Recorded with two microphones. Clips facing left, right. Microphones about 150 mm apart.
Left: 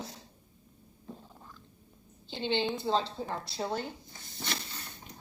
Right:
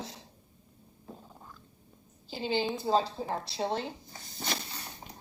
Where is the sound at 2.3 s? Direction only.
5° right (ahead or behind).